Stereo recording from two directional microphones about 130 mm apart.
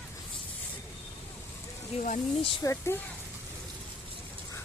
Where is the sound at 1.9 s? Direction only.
50° left (ahead or behind).